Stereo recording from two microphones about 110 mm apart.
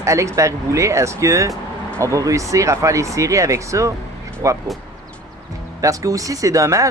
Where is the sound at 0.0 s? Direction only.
30° right (ahead or behind).